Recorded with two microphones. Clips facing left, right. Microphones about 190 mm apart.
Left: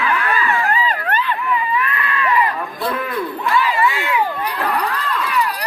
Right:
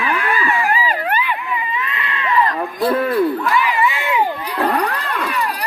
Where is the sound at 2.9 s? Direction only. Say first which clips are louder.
Right 9 dB; 35° right (ahead or behind).